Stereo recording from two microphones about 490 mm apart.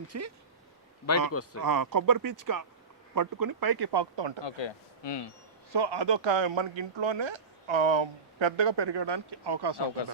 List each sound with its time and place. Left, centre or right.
0.1 s speech: right
1.3 s speech: left
1.6 s speech: right
4.4 s speech: left
5.7 s speech: right